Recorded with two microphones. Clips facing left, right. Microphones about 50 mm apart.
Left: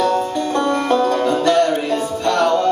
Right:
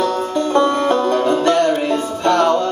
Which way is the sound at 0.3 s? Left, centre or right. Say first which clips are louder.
Right 3 dB; right.